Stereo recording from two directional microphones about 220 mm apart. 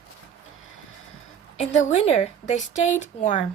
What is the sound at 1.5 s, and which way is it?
Speech, 30° left (ahead or behind).